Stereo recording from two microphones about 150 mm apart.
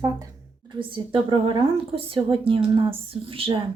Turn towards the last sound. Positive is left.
turn(degrees=-35)  # may be behind; listen again after turning